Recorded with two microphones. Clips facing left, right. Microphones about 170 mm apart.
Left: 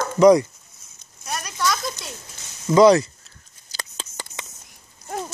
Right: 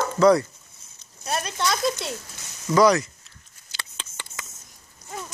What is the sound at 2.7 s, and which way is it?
Speech, 25° left (ahead or behind).